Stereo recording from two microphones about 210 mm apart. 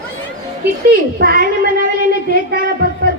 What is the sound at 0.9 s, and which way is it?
A child's voice, 45° right (ahead or behind).